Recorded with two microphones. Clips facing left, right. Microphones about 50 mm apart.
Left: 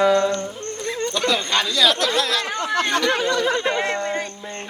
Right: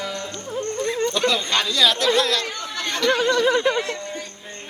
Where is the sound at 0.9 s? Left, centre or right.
Centre.